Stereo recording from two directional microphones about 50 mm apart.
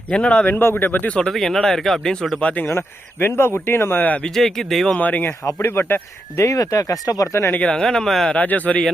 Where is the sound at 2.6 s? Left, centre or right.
Left.